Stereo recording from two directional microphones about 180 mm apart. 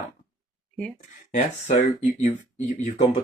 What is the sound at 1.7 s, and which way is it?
Speech, 40° left (ahead or behind).